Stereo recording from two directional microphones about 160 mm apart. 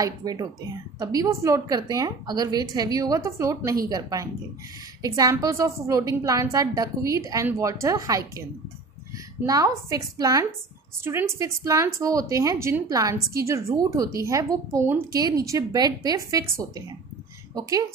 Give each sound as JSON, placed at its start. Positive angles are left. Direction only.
{"t": 0.0, "sound": "speech", "side_deg": -25}
{"t": 9.5, "sound": "speech", "side_deg": -20}